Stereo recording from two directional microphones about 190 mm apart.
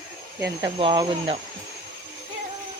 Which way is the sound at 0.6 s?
25° right (ahead or behind).